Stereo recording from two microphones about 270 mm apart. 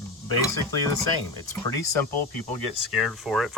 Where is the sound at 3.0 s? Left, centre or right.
Centre.